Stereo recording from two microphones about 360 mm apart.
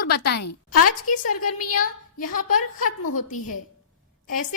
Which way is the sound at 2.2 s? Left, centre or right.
Left.